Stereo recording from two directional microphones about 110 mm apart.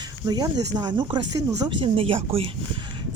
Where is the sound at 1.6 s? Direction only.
60° right (ahead or behind).